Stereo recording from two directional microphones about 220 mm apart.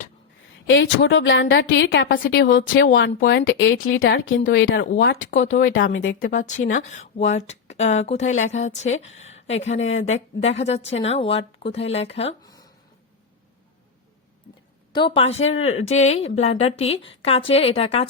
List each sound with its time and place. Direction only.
0.7 s a woman's voice: 60° left (ahead or behind)
6.3 s speech: 35° left (ahead or behind)
9.7 s a woman's voice: 60° left (ahead or behind)
10.0 s a woman's voice: 30° left (ahead or behind)
14.9 s a woman's voice: 25° left (ahead or behind)